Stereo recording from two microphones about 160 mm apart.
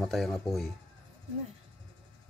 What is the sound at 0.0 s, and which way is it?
Speech, centre (ahead or behind).